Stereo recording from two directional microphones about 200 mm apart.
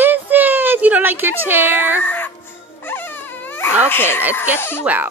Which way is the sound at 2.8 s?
10° left (ahead or behind).